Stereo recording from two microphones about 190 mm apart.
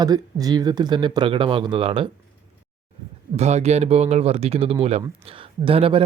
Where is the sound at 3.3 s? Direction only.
35° right (ahead or behind).